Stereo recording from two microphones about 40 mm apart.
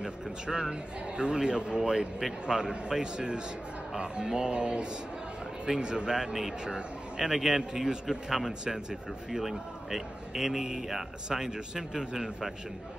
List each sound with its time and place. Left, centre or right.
0.0 s speech: centre
1.8 s a man's voice: centre
2.4 s a man's voice: centre